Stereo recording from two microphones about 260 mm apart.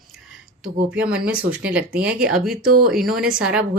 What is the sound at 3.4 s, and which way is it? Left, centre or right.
Speech, centre.